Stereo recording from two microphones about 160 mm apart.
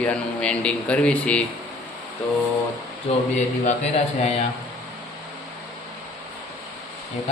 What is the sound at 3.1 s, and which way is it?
Speech, 40° left (ahead or behind).